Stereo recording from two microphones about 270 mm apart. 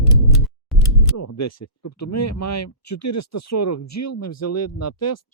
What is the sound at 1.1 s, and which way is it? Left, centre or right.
Speech, left.